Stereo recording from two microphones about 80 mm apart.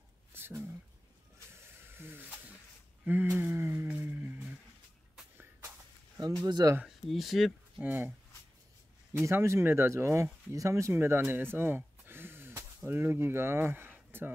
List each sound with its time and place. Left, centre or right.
0.3 s a sound: right
1.5 s snake: right
3.1 s a sound: right
6.4 s speech: right
7.1 s speech: centre
7.8 s speech: right
9.2 s speech: right